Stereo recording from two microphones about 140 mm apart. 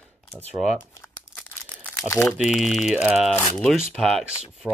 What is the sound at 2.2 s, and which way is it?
Speech, centre (ahead or behind).